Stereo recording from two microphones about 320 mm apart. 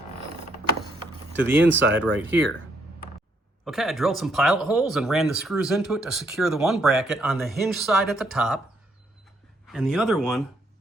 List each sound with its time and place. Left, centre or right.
1.4 s speech: centre
1.6 s speech: right
2.0 s speech: centre
3.6 s speech: centre
9.6 s speech: centre